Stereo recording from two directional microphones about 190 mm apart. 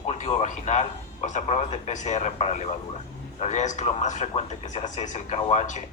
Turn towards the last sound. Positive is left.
turn(degrees=40)  # may be behind; listen again after turning